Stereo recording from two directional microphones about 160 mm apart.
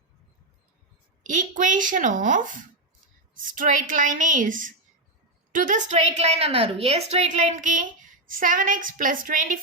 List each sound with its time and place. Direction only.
1.2 s a woman's voice: 50° right (ahead or behind)